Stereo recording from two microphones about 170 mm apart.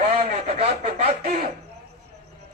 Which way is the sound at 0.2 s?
35° right (ahead or behind).